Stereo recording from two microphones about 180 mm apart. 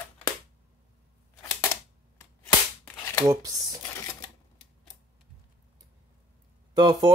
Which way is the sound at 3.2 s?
20° right (ahead or behind).